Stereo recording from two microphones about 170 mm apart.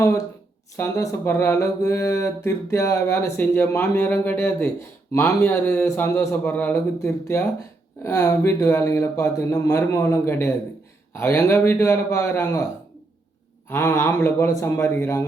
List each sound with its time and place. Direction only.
0.8 s mantra: 15° left (ahead or behind)
13.7 s mantra: 15° left (ahead or behind)